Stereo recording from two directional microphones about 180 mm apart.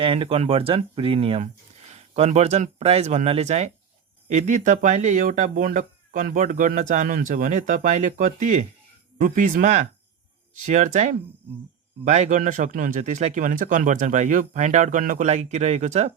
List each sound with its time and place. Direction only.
0.0 s speech: 30° right (ahead or behind)